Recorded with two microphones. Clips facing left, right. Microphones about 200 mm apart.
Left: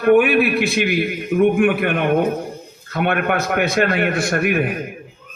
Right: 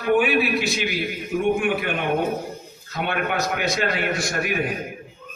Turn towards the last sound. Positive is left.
turn(degrees=60)  # may be behind; listen again after turning